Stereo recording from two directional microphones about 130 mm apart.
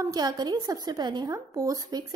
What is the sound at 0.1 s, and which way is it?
A woman's voice, 30° right (ahead or behind).